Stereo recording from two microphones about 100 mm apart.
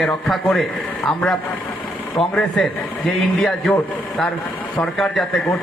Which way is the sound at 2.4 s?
5° left (ahead or behind).